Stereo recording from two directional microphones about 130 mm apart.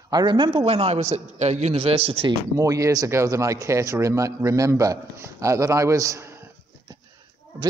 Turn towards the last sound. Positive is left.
turn(degrees=-20)  # may be behind; listen again after turning